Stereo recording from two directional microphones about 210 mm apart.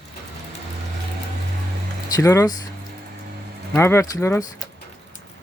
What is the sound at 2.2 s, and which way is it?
Speech, 15° left (ahead or behind).